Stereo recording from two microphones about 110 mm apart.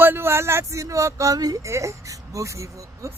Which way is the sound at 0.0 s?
20° right (ahead or behind).